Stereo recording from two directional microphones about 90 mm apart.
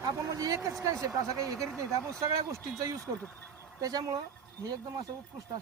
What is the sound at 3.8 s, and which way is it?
Speech, 40° right (ahead or behind).